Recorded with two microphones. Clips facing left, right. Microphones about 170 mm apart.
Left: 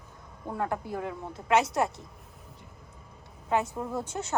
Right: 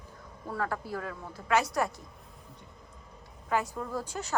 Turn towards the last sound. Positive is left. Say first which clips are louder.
# left 2 dB
turn(degrees=20)  # may be behind; listen again after turning